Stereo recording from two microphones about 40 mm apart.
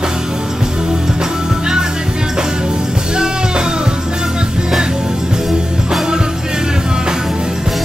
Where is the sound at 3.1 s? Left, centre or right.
Centre.